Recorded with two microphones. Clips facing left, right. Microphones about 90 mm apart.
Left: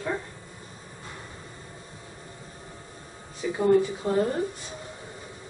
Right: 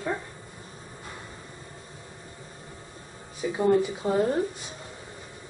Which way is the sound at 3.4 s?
15° right (ahead or behind).